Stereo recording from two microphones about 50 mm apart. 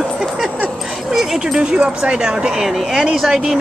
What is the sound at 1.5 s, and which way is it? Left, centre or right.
Speech, centre.